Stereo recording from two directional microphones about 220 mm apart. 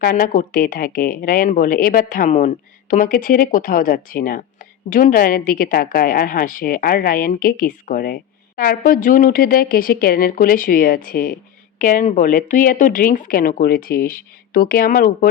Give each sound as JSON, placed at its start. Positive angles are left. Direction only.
{"t": 0.0, "sound": "a woman's voice", "side_deg": 40}